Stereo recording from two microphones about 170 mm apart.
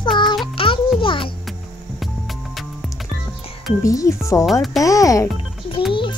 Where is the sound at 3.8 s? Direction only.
20° left (ahead or behind).